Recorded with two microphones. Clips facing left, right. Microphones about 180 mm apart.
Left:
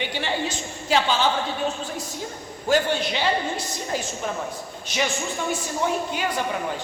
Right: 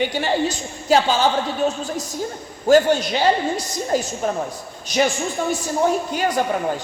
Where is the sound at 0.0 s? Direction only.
40° right (ahead or behind).